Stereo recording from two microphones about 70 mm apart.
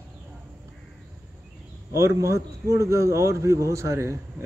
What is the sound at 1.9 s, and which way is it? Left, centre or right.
A man's voice, right.